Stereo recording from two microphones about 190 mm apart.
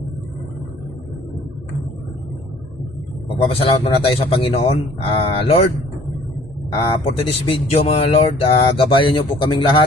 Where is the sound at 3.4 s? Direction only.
30° left (ahead or behind).